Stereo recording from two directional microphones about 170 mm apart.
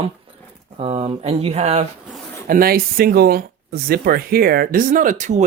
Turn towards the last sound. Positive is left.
turn(degrees=-45)  # may be behind; listen again after turning